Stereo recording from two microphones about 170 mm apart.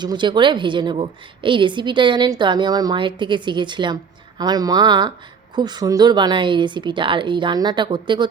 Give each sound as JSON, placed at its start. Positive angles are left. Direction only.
{"t": 0.0, "sound": "a woman's voice", "side_deg": -25}